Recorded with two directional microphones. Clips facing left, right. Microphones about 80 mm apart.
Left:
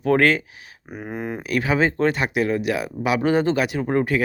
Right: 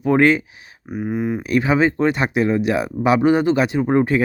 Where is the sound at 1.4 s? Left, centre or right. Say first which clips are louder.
Right 3 dB; right.